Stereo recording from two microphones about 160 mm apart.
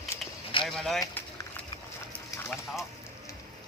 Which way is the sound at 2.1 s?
15° left (ahead or behind).